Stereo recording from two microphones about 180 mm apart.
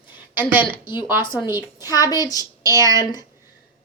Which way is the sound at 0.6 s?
30° left (ahead or behind).